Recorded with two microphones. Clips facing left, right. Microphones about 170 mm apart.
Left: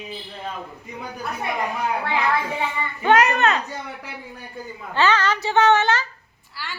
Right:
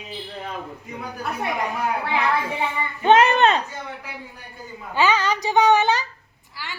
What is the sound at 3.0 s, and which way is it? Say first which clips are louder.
Speech: right 2 dB; 25° right (ahead or behind).